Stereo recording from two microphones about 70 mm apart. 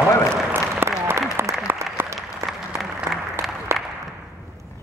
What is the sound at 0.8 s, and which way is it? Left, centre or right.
Applause, right.